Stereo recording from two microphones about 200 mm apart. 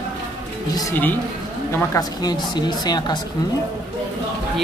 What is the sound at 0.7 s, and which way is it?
A woman's voice, 15° left (ahead or behind).